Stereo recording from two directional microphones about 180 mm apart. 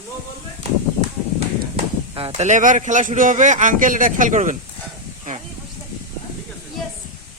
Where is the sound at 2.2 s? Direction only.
35° right (ahead or behind).